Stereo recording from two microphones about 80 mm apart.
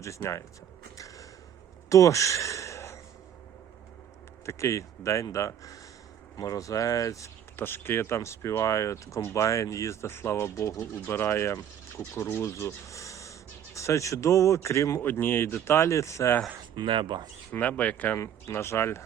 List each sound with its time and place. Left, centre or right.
0.0 s speech: left
1.9 s a sound: left
4.4 s speech: left
7.5 s speech: left
15.0 s speech: left
16.7 s speech: right
17.5 s speech: centre
18.2 s speech: left